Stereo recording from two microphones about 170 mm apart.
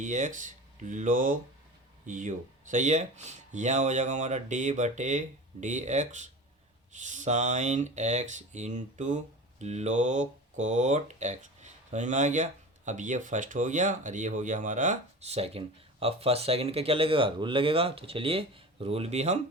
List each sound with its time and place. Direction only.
0.0 s speech: 45° right (ahead or behind)